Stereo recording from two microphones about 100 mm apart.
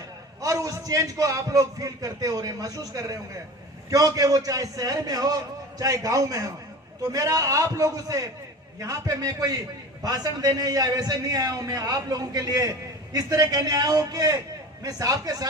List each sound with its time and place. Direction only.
0.4 s a man's voice: 35° right (ahead or behind)